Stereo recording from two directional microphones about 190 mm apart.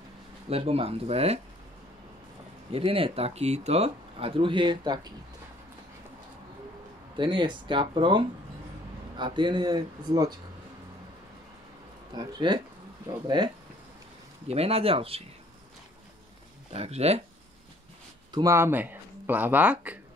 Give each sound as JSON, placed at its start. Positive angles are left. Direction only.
{"t": 0.5, "sound": "speech", "side_deg": -30}
{"t": 2.7, "sound": "speech", "side_deg": -30}
{"t": 7.2, "sound": "speech", "side_deg": -25}
{"t": 12.1, "sound": "speech", "side_deg": -20}
{"t": 14.5, "sound": "speech", "side_deg": -30}
{"t": 16.7, "sound": "speech", "side_deg": -35}
{"t": 18.3, "sound": "speech", "side_deg": -15}